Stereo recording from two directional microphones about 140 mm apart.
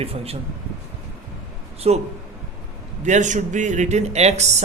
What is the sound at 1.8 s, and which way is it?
Speech, 45° right (ahead or behind).